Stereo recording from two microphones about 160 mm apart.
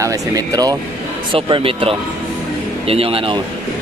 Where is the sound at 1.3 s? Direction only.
35° right (ahead or behind).